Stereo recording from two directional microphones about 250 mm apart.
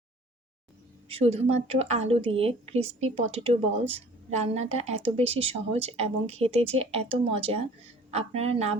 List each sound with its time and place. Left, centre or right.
1.0 s a woman's voice: right